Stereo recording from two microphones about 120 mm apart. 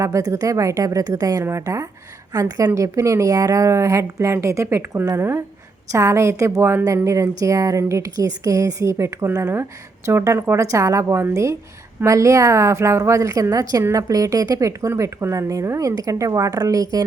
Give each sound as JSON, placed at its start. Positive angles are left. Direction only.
{"t": 0.0, "sound": "a woman's voice", "side_deg": -25}